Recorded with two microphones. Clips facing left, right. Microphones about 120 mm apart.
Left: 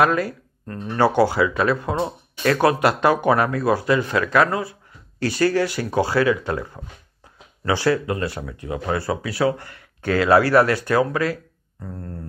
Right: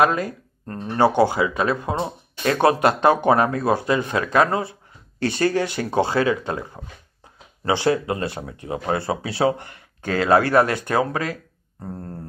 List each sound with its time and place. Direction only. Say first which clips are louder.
0.0 s speech: even; 25° right (ahead or behind)
0.9 s speech: even; 20° right (ahead or behind)